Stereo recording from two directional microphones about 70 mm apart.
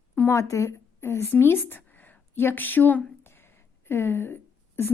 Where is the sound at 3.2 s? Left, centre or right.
Left.